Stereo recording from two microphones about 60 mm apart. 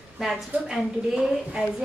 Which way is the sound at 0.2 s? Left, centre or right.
Centre.